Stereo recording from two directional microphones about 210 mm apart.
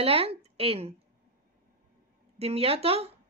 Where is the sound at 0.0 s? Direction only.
25° right (ahead or behind).